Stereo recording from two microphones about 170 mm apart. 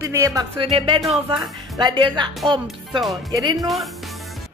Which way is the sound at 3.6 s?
Centre (ahead or behind).